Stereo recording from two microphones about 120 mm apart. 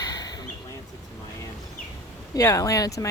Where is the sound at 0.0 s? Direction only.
35° left (ahead or behind).